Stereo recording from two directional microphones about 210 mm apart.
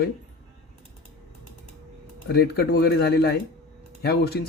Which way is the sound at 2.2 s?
50° left (ahead or behind).